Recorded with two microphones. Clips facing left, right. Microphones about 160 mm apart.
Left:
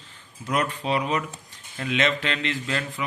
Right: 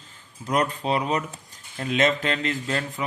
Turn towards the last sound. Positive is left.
turn(degrees=-40)  # may be behind; listen again after turning